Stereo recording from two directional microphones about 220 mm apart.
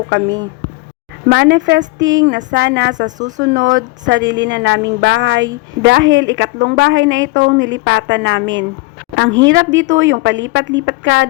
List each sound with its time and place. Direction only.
0.1 s a woman's voice: 55° right (ahead or behind)
3.2 s speech: 35° right (ahead or behind)
4.0 s a woman's voice: 55° right (ahead or behind)